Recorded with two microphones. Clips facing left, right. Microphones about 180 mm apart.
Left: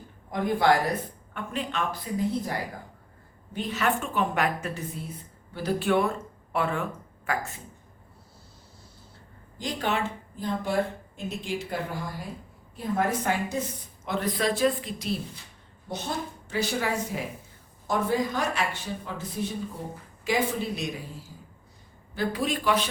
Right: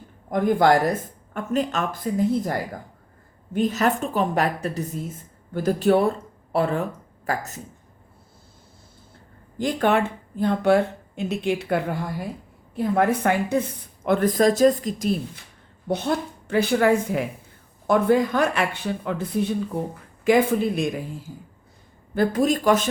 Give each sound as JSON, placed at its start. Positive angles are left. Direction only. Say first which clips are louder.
{"t": 0.3, "sound": "speech", "louder": "right 5 dB", "side_deg": -50}
{"t": 9.6, "sound": "speech", "louder": "right 8 dB", "side_deg": -55}
{"t": 15.9, "sound": "speech", "louder": "right 8 dB", "side_deg": -60}